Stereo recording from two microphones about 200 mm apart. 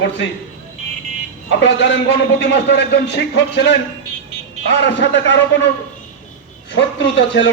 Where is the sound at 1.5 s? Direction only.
65° left (ahead or behind).